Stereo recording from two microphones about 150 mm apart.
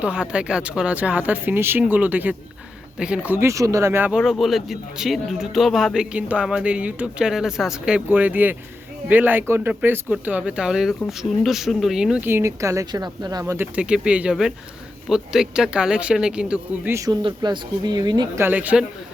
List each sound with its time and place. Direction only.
0.0 s speech: 5° right (ahead or behind); by 13.4 s 25° right (ahead or behind)
13.4 s speech: 10° right (ahead or behind)
16.9 s speech: 20° right (ahead or behind)
18.3 s speech: 10° right (ahead or behind)